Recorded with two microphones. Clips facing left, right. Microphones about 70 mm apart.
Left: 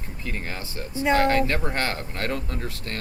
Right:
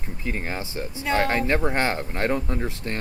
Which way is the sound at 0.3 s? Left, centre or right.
Right.